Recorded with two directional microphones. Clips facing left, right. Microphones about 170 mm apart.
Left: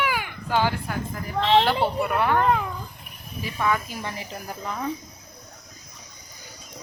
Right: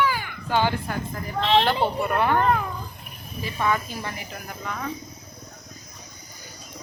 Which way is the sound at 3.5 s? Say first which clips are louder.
Even; centre (ahead or behind).